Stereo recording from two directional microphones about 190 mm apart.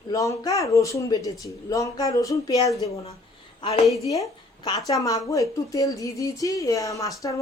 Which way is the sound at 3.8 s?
Centre (ahead or behind).